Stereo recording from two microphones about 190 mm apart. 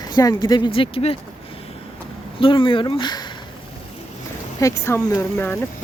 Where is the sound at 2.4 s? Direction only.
25° left (ahead or behind).